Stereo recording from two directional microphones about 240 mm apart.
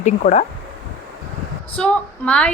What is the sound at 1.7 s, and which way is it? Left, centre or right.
Speech, centre.